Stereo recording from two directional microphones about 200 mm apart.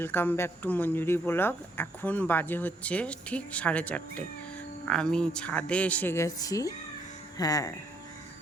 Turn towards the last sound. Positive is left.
turn(degrees=20)  # may be behind; listen again after turning